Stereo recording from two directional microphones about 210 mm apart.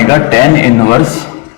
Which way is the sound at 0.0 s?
15° left (ahead or behind).